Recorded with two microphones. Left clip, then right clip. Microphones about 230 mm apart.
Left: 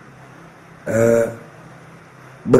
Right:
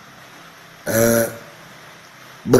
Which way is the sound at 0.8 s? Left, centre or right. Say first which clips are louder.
Left 2 dB; right.